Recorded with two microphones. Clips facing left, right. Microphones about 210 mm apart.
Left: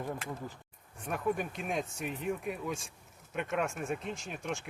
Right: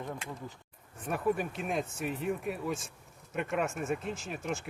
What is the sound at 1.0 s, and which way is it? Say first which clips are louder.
Speech: right 2 dB; centre (ahead or behind).